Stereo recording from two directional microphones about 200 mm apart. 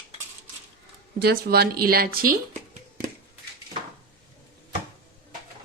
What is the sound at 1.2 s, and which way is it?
Speech, 50° right (ahead or behind).